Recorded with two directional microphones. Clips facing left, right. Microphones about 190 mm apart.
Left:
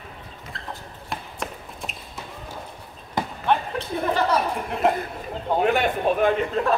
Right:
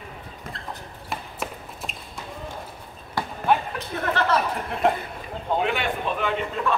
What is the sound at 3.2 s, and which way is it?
Basketball bounce, 20° left (ahead or behind).